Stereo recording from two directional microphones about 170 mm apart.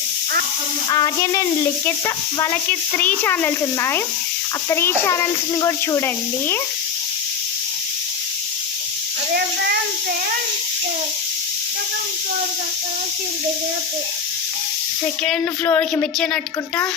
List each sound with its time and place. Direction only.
0.9 s sizzle: 25° left (ahead or behind)
2.0 s speech: 20° left (ahead or behind)
15.2 s speech: 10° left (ahead or behind)